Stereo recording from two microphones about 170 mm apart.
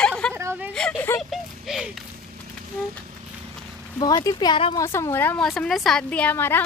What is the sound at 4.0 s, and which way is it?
Speech, 20° left (ahead or behind).